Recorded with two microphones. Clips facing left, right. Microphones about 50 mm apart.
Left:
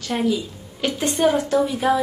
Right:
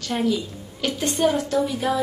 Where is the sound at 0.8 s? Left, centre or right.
Left.